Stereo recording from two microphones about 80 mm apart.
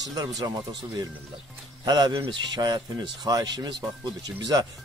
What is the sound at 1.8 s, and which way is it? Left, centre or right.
Speech, right.